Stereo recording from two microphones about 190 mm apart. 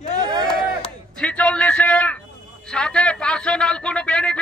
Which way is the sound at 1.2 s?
5° left (ahead or behind).